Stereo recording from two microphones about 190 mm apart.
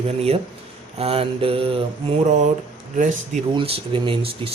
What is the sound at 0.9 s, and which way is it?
Speech, 30° right (ahead or behind).